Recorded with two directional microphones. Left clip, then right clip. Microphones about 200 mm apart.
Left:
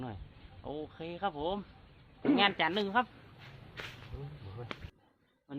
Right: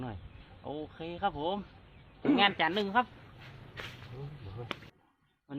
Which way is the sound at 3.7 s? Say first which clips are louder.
Right 1 dB; 20° left (ahead or behind).